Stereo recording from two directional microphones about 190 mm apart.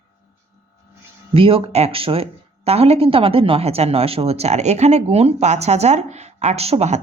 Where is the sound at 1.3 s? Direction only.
30° right (ahead or behind).